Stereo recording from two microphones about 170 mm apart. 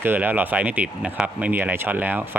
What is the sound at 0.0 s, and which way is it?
Speech, 10° right (ahead or behind).